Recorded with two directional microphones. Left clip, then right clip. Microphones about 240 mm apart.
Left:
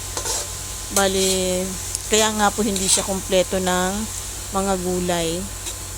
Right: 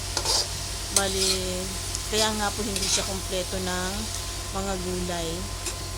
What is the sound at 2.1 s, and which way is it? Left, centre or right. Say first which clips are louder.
Speech: left 8 dB; left.